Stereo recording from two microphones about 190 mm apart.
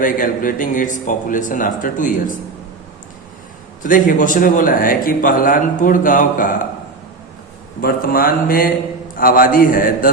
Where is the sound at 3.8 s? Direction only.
45° left (ahead or behind).